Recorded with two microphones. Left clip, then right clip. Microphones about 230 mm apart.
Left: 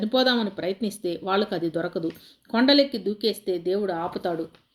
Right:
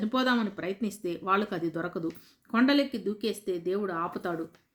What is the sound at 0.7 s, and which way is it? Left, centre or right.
Speech, right.